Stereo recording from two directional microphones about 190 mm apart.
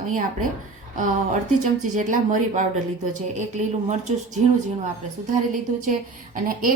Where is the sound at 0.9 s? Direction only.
40° right (ahead or behind).